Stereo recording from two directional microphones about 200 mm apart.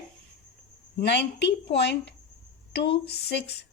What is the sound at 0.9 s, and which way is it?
Speech, 55° left (ahead or behind).